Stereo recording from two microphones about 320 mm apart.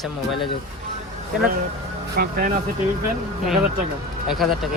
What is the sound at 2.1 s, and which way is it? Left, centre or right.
Speech, right.